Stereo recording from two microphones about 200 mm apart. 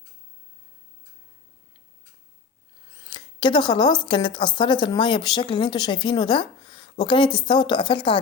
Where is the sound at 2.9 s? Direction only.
25° left (ahead or behind).